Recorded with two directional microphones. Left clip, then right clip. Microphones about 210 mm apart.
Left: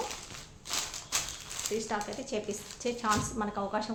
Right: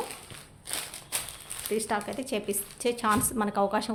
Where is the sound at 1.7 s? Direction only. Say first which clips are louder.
Right 5 dB; 55° right (ahead or behind).